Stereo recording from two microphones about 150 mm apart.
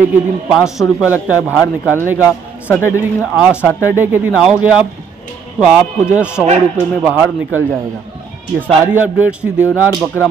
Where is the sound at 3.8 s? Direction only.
15° right (ahead or behind).